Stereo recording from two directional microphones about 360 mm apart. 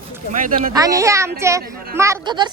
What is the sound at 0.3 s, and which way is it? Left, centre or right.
Speech, right.